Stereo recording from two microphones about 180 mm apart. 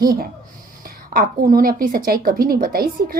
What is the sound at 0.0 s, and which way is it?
A woman's voice, 55° right (ahead or behind).